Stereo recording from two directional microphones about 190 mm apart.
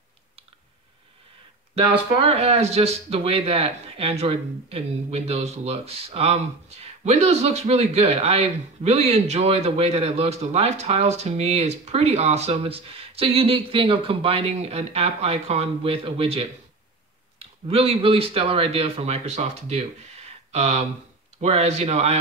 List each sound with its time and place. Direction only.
1.8 s speech: 30° right (ahead or behind)